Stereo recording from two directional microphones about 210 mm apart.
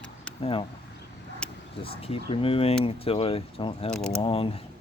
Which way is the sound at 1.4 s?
5° left (ahead or behind).